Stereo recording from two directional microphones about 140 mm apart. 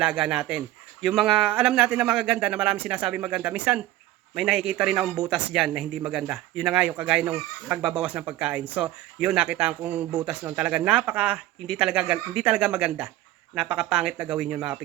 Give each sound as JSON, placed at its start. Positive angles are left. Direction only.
{"t": 0.0, "sound": "a man's voice", "side_deg": -5}